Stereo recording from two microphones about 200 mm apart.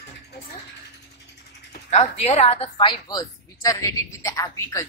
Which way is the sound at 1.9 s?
30° left (ahead or behind).